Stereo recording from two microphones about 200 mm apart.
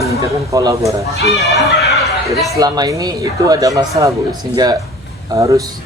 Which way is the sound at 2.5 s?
20° right (ahead or behind).